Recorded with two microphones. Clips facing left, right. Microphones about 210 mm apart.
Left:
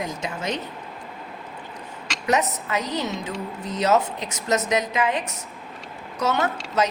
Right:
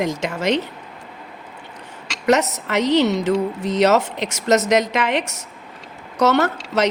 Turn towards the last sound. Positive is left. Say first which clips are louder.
# right 5 dB
turn(degrees=-75)  # may be behind; listen again after turning